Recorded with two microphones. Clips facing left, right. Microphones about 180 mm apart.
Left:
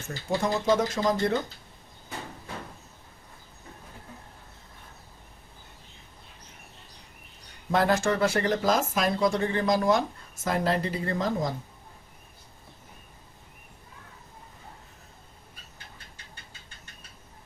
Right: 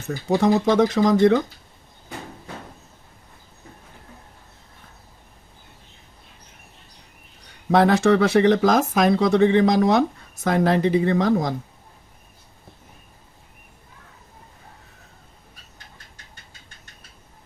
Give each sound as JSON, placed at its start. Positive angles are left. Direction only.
{"t": 0.3, "sound": "speech", "side_deg": -70}
{"t": 7.7, "sound": "speech", "side_deg": -75}